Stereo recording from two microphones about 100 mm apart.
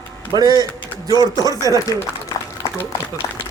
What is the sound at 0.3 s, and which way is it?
A man's voice, 40° right (ahead or behind).